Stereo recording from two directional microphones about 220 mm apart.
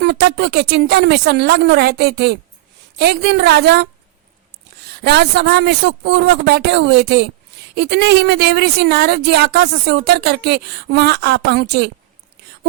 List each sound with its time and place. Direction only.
0.0 s a woman's voice: 50° right (ahead or behind)
4.9 s a woman's voice: 50° right (ahead or behind)